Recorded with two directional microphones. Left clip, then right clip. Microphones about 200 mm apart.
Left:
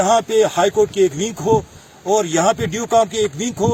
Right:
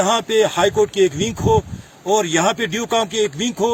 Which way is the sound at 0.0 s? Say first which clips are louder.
Left 2 dB; 5° right (ahead or behind).